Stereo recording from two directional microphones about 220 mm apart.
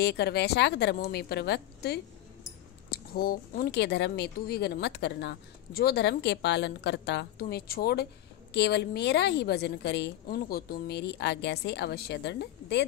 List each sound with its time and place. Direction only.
0.0 s a woman's voice: 50° left (ahead or behind)